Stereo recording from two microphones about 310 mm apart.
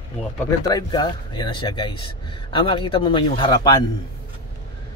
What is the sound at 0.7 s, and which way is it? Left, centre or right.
Speech, centre.